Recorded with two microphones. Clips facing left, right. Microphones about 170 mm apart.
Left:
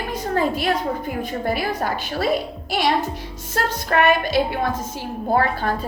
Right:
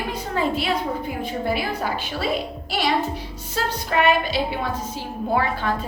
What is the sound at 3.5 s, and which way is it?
A woman's voice, 50° left (ahead or behind).